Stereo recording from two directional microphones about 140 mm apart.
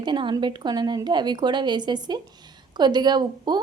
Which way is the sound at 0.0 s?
35° right (ahead or behind).